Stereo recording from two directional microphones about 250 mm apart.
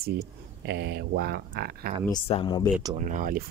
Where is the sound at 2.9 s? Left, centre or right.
Right.